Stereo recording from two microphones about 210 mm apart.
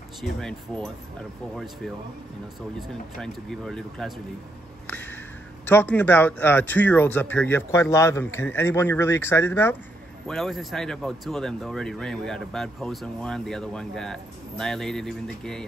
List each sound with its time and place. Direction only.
0.2 s speech: 5° left (ahead or behind)
2.9 s speech: centre (ahead or behind)
4.8 s a sound: 10° left (ahead or behind)
5.7 s speech: 10° left (ahead or behind)